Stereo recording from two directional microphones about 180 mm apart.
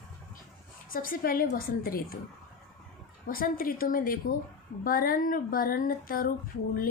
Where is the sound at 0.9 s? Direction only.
50° left (ahead or behind).